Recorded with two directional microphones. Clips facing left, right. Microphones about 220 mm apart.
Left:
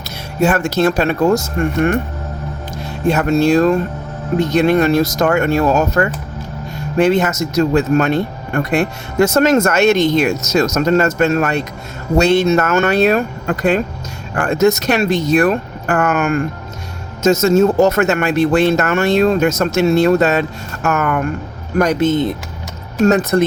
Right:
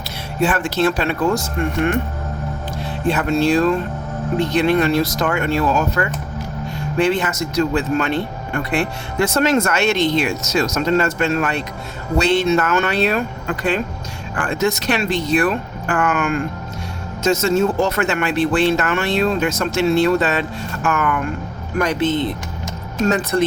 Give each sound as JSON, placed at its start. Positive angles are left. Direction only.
{"t": 0.3, "sound": "speech", "side_deg": 45}